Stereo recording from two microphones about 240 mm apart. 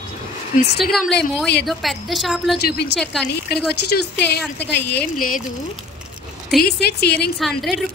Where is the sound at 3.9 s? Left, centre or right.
Left.